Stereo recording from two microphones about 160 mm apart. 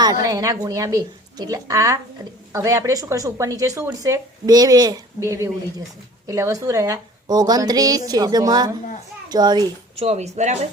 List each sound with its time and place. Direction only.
0.0 s a woman's voice: 25° right (ahead or behind)
10.0 s speech: 45° right (ahead or behind)